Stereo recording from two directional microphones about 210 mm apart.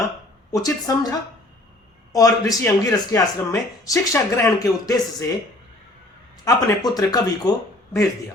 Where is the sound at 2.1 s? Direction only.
15° left (ahead or behind).